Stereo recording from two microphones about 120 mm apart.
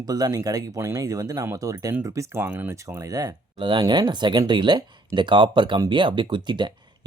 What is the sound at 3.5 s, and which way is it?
Speech, 45° right (ahead or behind).